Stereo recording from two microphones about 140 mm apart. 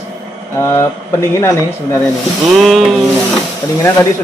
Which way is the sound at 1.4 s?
15° left (ahead or behind).